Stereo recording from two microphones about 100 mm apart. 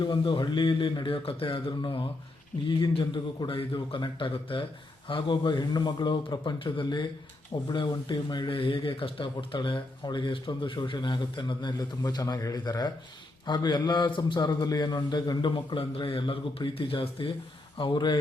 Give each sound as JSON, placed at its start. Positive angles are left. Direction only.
{"t": 0.0, "sound": "speech", "side_deg": 50}